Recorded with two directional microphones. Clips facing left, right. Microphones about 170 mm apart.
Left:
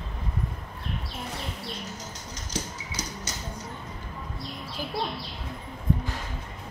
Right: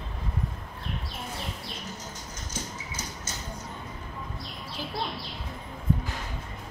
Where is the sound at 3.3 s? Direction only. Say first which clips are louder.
Left 1 dB; 75° left (ahead or behind).